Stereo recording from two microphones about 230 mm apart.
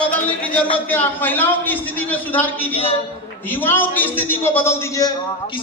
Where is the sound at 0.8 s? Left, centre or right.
Centre.